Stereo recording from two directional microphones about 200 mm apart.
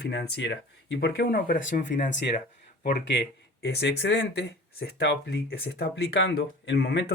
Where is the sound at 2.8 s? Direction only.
60° left (ahead or behind).